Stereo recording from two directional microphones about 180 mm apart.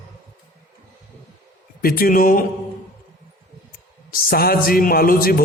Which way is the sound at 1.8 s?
55° left (ahead or behind).